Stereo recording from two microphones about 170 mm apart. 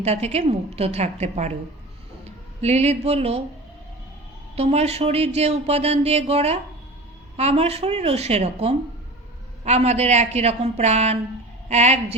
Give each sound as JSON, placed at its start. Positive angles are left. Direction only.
{"t": 0.0, "sound": "speech", "side_deg": -40}
{"t": 2.6, "sound": "speech", "side_deg": -40}
{"t": 4.5, "sound": "speech", "side_deg": -40}